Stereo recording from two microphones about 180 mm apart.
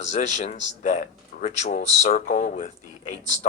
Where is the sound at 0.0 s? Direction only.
40° left (ahead or behind).